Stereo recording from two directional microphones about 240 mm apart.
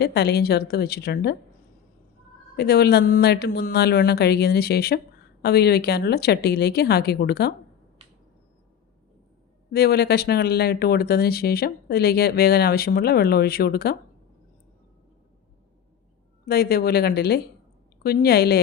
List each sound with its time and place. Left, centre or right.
0.0 s speech: left
2.6 s a woman's voice: left
9.7 s speech: left
16.5 s speech: left